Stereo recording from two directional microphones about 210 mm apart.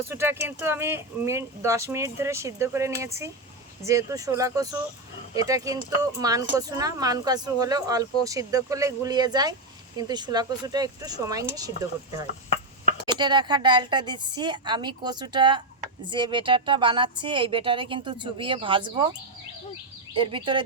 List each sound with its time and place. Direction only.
0.1 s a woman's voice: 10° right (ahead or behind)
20.1 s a woman's voice: 25° right (ahead or behind)